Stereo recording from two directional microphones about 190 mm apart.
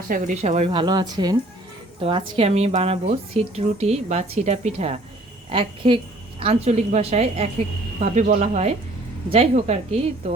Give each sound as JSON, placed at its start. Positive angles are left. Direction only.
{"t": 0.1, "sound": "a woman's voice", "side_deg": -40}